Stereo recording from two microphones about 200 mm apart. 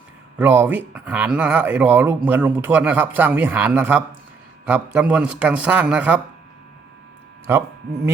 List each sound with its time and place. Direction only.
0.3 s speech: 10° right (ahead or behind)
7.5 s speech: 10° right (ahead or behind)